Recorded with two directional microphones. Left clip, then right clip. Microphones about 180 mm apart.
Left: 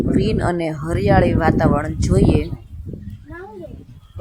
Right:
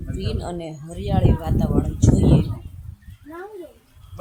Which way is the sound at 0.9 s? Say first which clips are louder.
Left 9 dB; 20° left (ahead or behind).